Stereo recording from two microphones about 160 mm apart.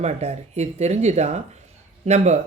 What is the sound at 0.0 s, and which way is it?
Speech, 45° right (ahead or behind).